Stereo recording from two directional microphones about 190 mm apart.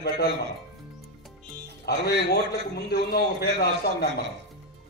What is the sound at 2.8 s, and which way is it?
A man's voice, 55° left (ahead or behind).